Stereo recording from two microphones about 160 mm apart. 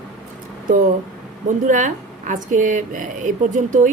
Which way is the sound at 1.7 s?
50° right (ahead or behind).